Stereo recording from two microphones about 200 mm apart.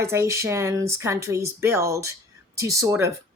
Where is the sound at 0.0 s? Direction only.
15° right (ahead or behind).